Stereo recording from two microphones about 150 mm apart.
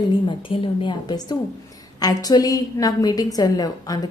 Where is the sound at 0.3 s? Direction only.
35° left (ahead or behind).